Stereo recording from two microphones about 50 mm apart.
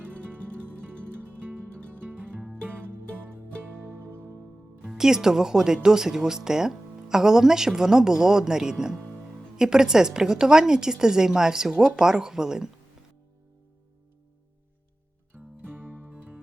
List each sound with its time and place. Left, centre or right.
0.2 s music: right
4.9 s speech: centre
15.3 s music: right